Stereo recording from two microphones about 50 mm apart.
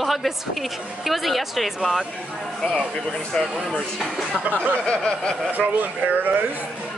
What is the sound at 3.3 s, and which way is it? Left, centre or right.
Speech, centre.